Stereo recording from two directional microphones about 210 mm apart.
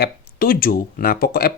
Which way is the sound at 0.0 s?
45° left (ahead or behind).